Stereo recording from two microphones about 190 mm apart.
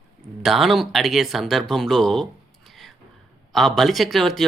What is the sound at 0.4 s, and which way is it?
Speech, centre (ahead or behind).